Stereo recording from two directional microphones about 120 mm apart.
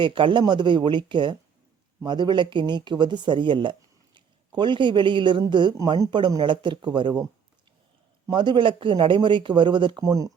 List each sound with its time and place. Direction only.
0.0 s speech: 45° right (ahead or behind)
8.3 s speech: 40° right (ahead or behind)